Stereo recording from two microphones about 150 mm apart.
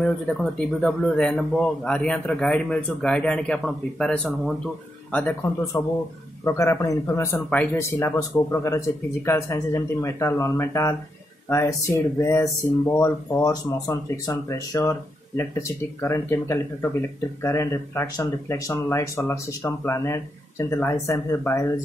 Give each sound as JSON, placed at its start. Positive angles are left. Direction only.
{"t": 0.0, "sound": "a man's voice", "side_deg": 5}
{"t": 5.7, "sound": "speech", "side_deg": 20}
{"t": 7.3, "sound": "speech", "side_deg": 10}